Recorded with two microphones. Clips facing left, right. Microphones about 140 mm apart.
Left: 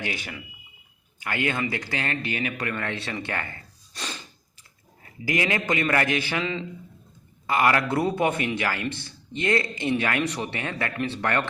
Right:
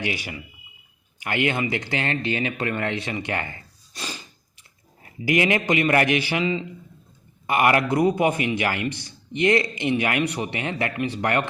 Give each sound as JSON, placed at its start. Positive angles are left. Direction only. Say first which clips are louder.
{"t": 0.0, "sound": "a man's voice", "louder": "right 3 dB", "side_deg": -15}
{"t": 3.9, "sound": "gasp", "louder": "right 1 dB", "side_deg": -5}
{"t": 5.2, "sound": "speech", "louder": "right 5 dB", "side_deg": -20}
{"t": 6.4, "sound": "a man's voice", "louder": "right 5 dB", "side_deg": -5}
{"t": 7.4, "sound": "a man's voice", "louder": "right 2 dB", "side_deg": -20}